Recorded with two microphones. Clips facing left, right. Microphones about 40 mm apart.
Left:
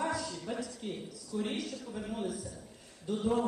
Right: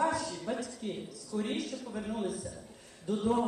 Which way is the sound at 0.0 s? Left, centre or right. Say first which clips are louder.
Right 4 dB; centre.